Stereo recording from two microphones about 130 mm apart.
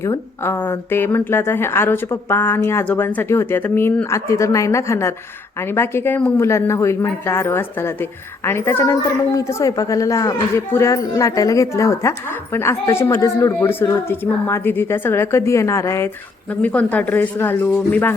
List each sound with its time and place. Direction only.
0.0 s a woman's voice: 20° left (ahead or behind)
16.6 s a woman's voice: 10° left (ahead or behind)